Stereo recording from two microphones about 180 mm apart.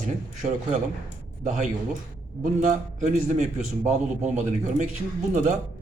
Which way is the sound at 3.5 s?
40° right (ahead or behind).